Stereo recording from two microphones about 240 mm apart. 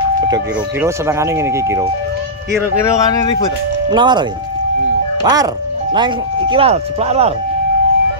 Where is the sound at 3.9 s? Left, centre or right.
Centre.